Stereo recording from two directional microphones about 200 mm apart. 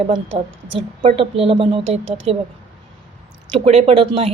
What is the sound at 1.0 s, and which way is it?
A woman's voice, 30° right (ahead or behind).